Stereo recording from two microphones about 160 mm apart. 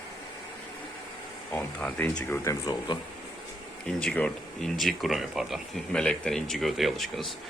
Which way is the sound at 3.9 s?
5° left (ahead or behind).